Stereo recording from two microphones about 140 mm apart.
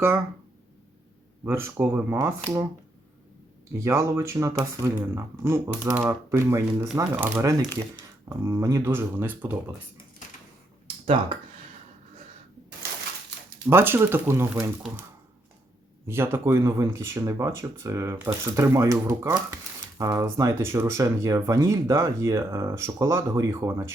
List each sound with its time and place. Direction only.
1.5 s speech: 15° right (ahead or behind)
3.8 s speech: 20° right (ahead or behind)
10.8 s a sound: 40° right (ahead or behind)
13.7 s speech: 15° right (ahead or behind)
16.0 s speech: 15° right (ahead or behind)